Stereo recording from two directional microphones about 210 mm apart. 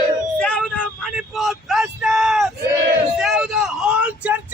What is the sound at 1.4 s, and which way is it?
Vehicle, centre (ahead or behind).